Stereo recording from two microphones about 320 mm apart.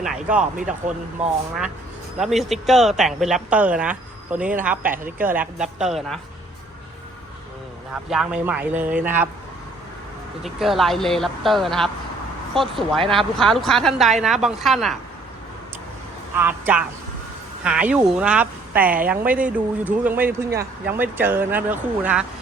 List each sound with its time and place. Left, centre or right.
0.0 s speech: centre
0.7 s speech: right
2.1 s speech: centre
8.1 s speech: centre
10.4 s speech: centre
16.4 s speech: centre